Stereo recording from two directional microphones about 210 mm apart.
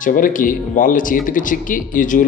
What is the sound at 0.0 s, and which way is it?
A man's voice, 40° left (ahead or behind).